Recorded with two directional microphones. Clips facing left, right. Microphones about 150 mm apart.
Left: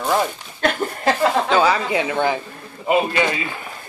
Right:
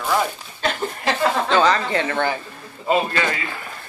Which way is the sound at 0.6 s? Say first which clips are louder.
Left 3 dB; 55° left (ahead or behind).